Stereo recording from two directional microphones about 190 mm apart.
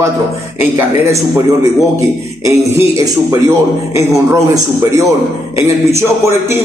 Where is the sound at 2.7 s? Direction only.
15° right (ahead or behind).